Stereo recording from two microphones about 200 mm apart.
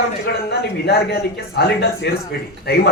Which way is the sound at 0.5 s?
50° left (ahead or behind).